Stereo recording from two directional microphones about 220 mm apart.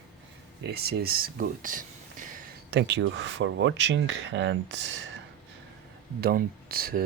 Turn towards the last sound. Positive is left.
turn(degrees=-45)  # may be behind; listen again after turning